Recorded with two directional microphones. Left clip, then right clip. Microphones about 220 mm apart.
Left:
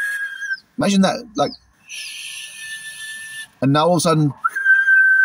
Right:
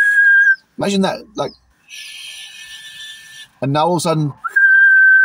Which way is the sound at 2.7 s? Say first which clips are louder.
Left 3 dB; 20° right (ahead or behind).